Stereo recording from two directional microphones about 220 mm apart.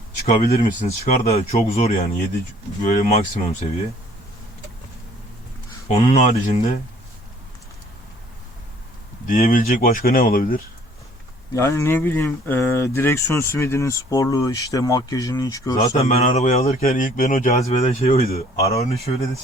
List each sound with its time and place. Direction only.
0.3 s speech: 35° left (ahead or behind)
5.9 s speech: 35° left (ahead or behind)
9.2 s speech: 40° left (ahead or behind)
11.5 s speech: 15° left (ahead or behind)
16.0 s speech: 30° left (ahead or behind)